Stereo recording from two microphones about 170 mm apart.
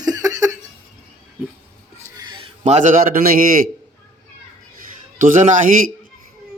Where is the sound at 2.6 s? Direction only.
45° right (ahead or behind).